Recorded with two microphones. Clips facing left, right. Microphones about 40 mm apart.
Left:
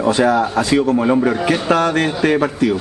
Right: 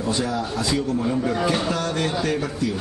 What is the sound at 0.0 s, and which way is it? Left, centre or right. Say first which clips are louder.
Speech: left 10 dB; left.